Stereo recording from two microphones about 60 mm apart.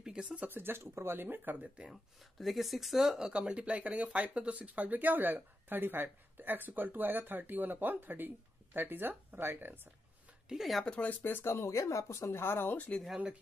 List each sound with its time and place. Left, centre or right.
0.0 s a sound: centre
0.4 s speech: right
1.9 s speech: centre
3.3 s speech: centre; by 9.8 s right
10.5 s speech: centre
10.9 s speech: left
11.4 s speech: left
12.7 s speech: left